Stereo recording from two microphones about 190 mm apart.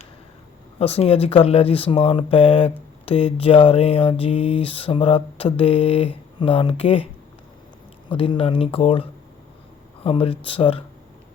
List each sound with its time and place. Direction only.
0.8 s speech: 30° left (ahead or behind)
8.1 s speech: 30° left (ahead or behind)